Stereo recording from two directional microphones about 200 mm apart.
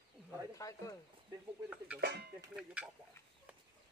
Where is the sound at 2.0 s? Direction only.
50° right (ahead or behind).